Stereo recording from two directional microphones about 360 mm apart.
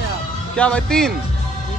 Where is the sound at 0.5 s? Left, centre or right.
Centre.